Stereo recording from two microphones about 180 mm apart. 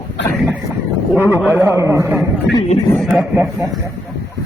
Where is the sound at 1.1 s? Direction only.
10° right (ahead or behind).